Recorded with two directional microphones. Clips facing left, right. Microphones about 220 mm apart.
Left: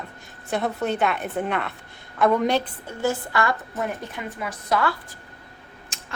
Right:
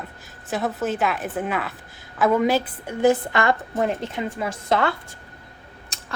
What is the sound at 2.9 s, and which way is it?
A woman's voice, 20° right (ahead or behind).